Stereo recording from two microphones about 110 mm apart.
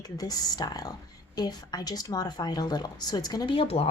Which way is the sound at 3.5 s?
60° left (ahead or behind).